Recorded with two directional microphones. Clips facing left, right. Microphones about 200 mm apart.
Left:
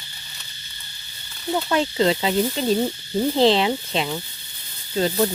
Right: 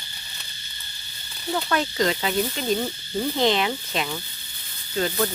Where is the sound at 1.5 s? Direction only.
25° left (ahead or behind).